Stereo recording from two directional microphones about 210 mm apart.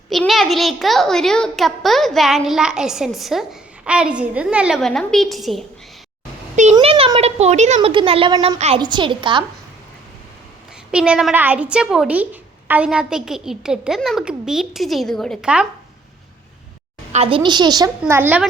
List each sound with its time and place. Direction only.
0.1 s a child's voice: centre (ahead or behind)
6.7 s speech: 25° right (ahead or behind)
10.9 s a child's voice: 5° right (ahead or behind)
17.1 s speech: 30° right (ahead or behind)
18.0 s speech: 10° right (ahead or behind)